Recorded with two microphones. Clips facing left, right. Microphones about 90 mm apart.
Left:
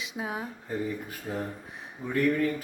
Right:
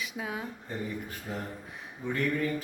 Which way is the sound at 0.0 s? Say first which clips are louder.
Left 2 dB; 25° left (ahead or behind).